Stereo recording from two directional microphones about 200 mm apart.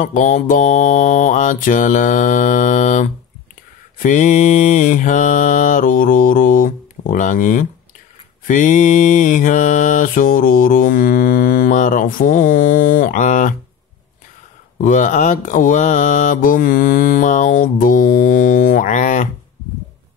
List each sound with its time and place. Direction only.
0.0 s mantra: 40° left (ahead or behind)
14.8 s mantra: 40° left (ahead or behind)